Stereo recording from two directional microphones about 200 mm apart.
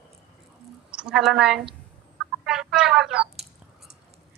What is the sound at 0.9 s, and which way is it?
A woman's voice, 5° right (ahead or behind).